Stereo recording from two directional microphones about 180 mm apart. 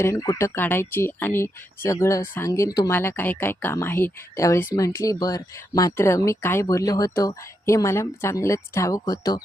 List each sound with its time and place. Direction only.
0.0 s speech: 20° left (ahead or behind)